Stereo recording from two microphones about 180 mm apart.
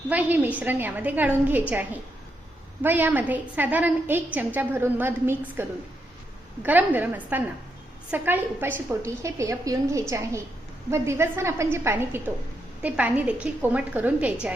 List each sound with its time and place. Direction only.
0.1 s a woman's voice: 10° right (ahead or behind)
2.8 s a woman's voice: 10° right (ahead or behind)